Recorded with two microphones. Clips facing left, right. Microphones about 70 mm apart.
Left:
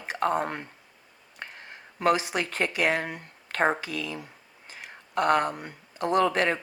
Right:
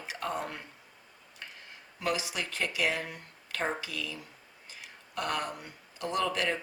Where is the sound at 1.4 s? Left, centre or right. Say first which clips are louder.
Left 6 dB; left.